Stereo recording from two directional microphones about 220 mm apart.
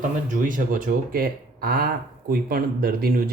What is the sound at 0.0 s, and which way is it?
Speech, 35° right (ahead or behind).